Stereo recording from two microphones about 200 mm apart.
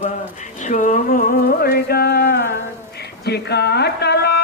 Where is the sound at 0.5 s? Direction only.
40° left (ahead or behind).